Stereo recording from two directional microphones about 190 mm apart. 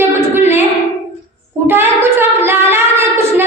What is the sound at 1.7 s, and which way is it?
Child singing, 10° right (ahead or behind).